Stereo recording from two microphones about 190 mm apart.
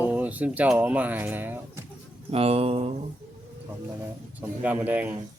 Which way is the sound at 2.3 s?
30° right (ahead or behind).